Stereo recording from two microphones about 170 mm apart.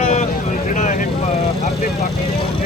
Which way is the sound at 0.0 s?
40° left (ahead or behind).